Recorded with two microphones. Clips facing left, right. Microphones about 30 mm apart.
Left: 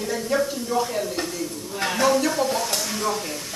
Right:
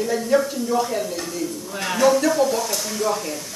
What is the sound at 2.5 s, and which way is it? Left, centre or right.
Speech, left.